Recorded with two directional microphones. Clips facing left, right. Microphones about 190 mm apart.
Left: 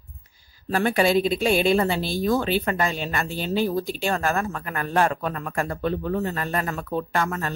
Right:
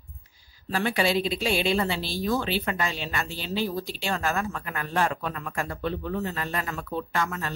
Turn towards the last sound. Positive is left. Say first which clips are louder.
# left 4 dB
turn(degrees=50)  # may be behind; listen again after turning